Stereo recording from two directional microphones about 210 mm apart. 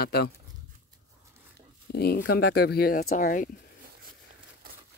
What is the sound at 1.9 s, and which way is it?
Speech, 45° left (ahead or behind).